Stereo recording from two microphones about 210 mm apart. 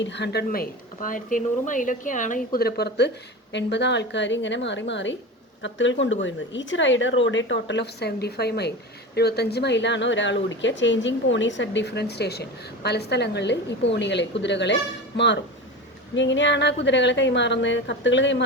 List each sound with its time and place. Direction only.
0.0 s speech: 55° left (ahead or behind)